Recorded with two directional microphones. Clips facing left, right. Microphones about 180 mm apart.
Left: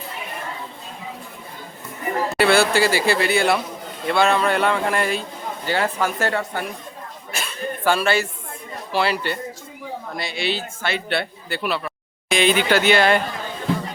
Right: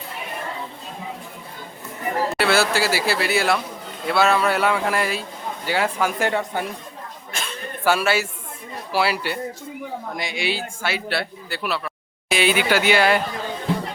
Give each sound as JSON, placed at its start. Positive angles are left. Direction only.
{"t": 2.4, "sound": "speech", "side_deg": 0}
{"t": 7.3, "sound": "a sound", "side_deg": 10}
{"t": 7.9, "sound": "speech", "side_deg": -10}